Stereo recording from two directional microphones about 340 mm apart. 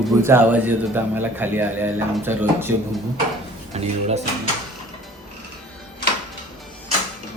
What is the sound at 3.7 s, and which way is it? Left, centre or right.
Speech, centre.